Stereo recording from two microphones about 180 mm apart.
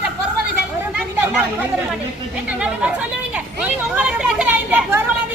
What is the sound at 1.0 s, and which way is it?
Chatter, 5° right (ahead or behind).